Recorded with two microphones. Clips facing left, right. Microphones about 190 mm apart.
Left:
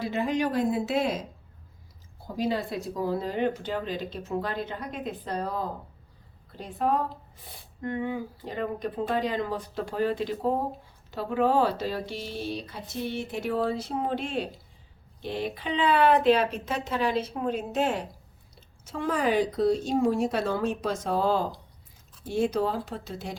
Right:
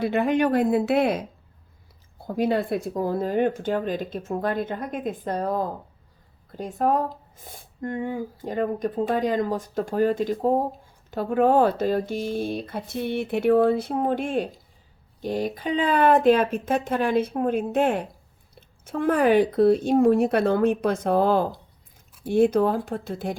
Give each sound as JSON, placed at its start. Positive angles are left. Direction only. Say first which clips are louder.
{"t": 0.0, "sound": "speech", "louder": "right 6 dB", "side_deg": -60}